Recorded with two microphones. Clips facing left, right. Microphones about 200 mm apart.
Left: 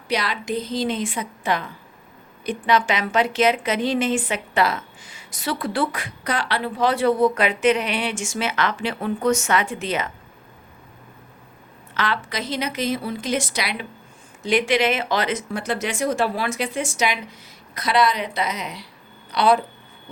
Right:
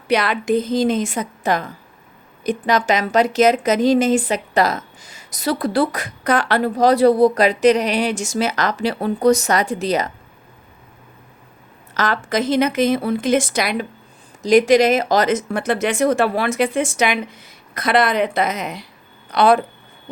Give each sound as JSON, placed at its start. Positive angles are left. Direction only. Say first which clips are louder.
{"t": 0.1, "sound": "a woman's voice", "louder": "right 7 dB", "side_deg": -55}
{"t": 11.9, "sound": "a woman's voice", "louder": "right 6 dB", "side_deg": -45}